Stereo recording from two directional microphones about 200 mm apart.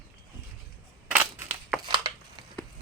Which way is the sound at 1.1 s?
10° right (ahead or behind).